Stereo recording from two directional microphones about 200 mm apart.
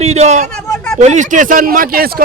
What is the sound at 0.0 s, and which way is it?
A man's voice, 35° right (ahead or behind).